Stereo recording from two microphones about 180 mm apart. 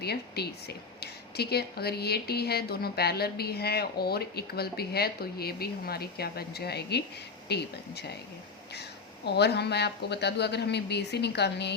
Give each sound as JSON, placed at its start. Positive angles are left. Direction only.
{"t": 0.0, "sound": "speech", "side_deg": 65}
{"t": 9.2, "sound": "speech", "side_deg": 65}